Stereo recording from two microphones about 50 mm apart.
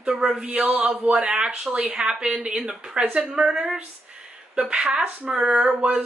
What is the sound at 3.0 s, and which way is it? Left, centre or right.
Speech, centre.